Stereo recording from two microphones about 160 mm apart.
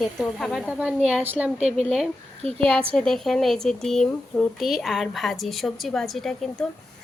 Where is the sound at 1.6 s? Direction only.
40° right (ahead or behind).